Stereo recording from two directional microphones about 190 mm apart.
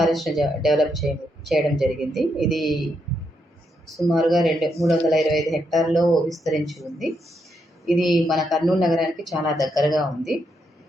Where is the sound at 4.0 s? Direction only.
Centre (ahead or behind).